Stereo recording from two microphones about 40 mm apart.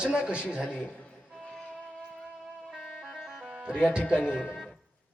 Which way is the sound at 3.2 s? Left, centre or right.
Centre.